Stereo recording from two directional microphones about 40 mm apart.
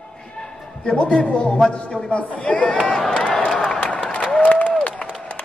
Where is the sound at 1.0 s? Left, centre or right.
Left.